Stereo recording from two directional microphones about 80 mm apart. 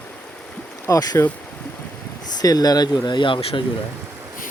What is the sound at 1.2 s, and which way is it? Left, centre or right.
Speech, left.